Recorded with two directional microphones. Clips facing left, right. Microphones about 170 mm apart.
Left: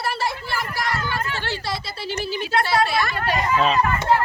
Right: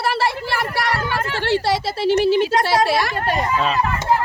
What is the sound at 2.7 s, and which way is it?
Speech, 80° right.